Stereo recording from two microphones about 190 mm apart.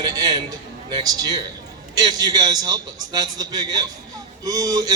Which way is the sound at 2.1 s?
20° right (ahead or behind).